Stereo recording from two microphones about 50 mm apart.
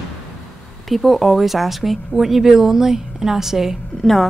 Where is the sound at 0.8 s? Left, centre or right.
Centre.